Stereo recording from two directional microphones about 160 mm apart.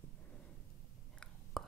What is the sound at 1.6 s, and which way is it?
Whispering, centre (ahead or behind).